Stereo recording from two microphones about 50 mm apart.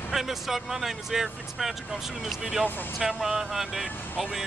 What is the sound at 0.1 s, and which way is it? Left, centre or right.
Speech, centre.